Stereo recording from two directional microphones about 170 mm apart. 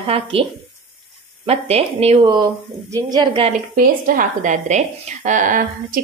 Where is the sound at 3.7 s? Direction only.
55° right (ahead or behind).